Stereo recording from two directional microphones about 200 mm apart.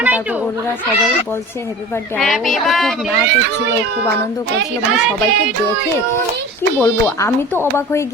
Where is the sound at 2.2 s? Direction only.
Centre (ahead or behind).